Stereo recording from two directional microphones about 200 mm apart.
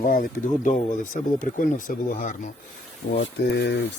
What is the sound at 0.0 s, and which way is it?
Speech, 45° left (ahead or behind).